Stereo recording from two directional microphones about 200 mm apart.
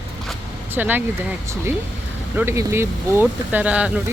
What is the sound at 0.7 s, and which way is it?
Speech, 10° right (ahead or behind).